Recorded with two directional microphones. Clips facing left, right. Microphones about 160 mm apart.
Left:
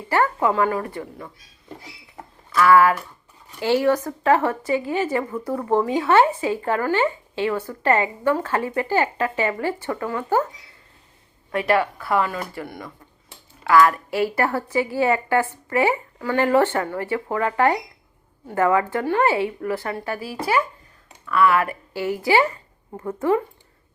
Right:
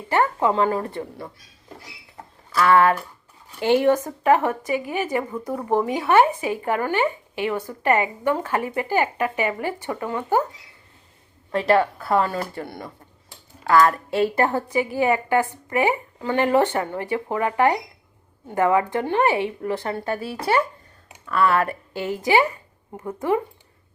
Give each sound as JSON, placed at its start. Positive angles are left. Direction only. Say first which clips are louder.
{"t": 0.1, "sound": "a woman's voice", "louder": "even", "side_deg": -20}
{"t": 2.6, "sound": "a woman's voice", "louder": "left 1 dB", "side_deg": -25}
{"t": 11.5, "sound": "a woman's voice", "louder": "right 2 dB", "side_deg": -30}
{"t": 22.2, "sound": "a woman's voice", "louder": "even", "side_deg": -20}